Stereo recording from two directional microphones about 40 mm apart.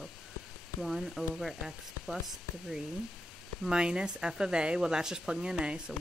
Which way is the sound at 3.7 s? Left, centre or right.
Right.